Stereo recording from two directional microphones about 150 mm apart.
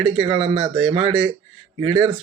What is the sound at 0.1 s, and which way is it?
Speech, 40° right (ahead or behind).